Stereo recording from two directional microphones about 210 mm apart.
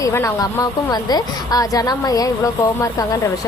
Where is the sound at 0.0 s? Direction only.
15° left (ahead or behind).